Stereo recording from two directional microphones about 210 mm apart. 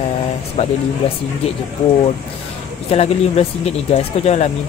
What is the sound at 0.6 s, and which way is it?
Speech, 30° left (ahead or behind).